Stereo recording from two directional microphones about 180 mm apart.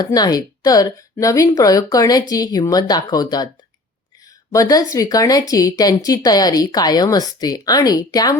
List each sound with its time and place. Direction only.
0.0 s speech: 20° left (ahead or behind)
4.5 s speech: 20° left (ahead or behind)